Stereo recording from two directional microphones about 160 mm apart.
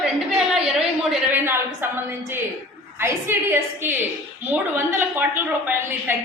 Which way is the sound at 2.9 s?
15° right (ahead or behind).